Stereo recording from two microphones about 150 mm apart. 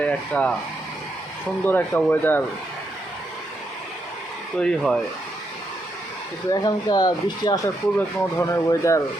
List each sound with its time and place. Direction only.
0.0 s speech: 10° left (ahead or behind)
1.6 s speech: 15° left (ahead or behind)
4.5 s speech: 5° left (ahead or behind)
6.5 s speech: 25° left (ahead or behind)